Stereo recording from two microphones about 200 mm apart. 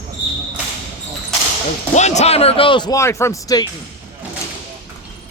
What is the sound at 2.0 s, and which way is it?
Speech, 35° left (ahead or behind).